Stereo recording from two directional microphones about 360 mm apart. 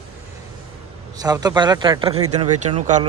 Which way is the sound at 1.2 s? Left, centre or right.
Centre.